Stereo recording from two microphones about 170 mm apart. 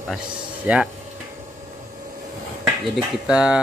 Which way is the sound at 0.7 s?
10° right (ahead or behind).